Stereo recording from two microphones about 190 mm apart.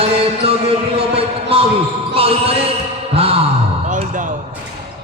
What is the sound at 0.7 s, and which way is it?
Speech, 30° right (ahead or behind).